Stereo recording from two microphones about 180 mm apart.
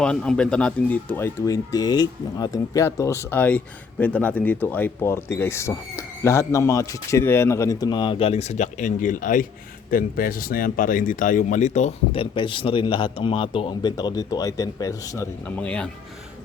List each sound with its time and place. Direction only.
0.0 s speech: 5° left (ahead or behind)